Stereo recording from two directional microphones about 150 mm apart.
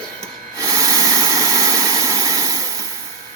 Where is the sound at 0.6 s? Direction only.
20° right (ahead or behind).